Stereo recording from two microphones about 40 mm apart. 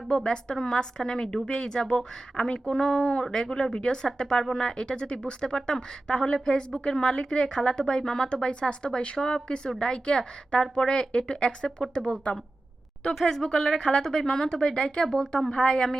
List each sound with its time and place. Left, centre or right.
0.1 s speech: left
2.3 s speech: left
13.1 s speech: centre